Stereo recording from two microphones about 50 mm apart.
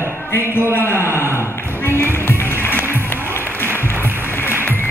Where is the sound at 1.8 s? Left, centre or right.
Left.